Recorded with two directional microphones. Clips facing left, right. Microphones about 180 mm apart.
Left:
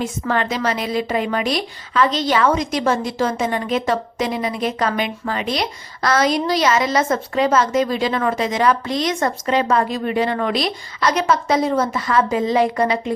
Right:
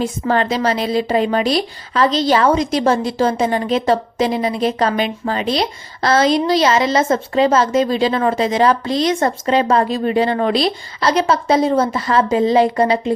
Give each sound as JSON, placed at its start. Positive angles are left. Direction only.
{"t": 0.0, "sound": "a woman's voice", "side_deg": -35}